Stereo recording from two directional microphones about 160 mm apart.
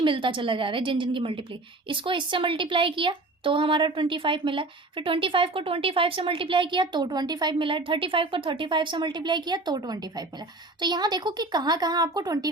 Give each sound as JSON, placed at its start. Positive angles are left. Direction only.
{"t": 0.0, "sound": "speech", "side_deg": -30}